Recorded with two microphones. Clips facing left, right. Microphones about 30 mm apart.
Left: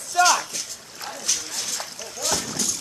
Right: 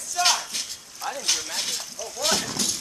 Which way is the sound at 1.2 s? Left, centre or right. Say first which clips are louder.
Even; right.